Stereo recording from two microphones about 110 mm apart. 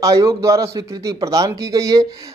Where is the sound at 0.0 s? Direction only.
30° right (ahead or behind).